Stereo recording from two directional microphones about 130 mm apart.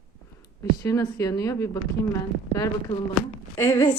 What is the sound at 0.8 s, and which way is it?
A woman's voice, 25° left (ahead or behind).